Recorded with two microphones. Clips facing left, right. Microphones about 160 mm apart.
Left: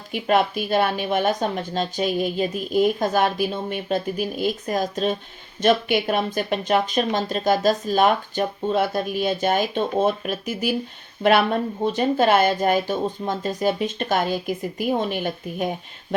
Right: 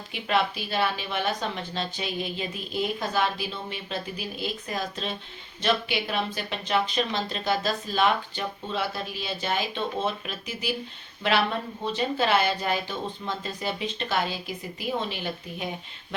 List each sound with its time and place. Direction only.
0.1 s a woman's voice: 50° left (ahead or behind)